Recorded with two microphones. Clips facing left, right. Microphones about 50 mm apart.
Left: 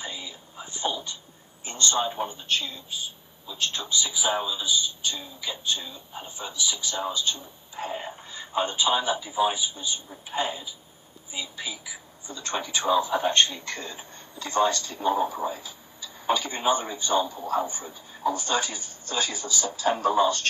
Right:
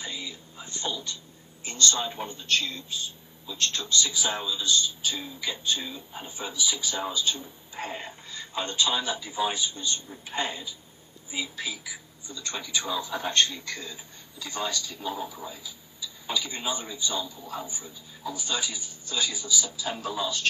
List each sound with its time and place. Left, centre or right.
0.0 s speech: centre
5.0 s speech: centre
8.0 s speech: centre
11.2 s speech: centre
11.6 s speech: centre
12.3 s speech: left
18.3 s speech: left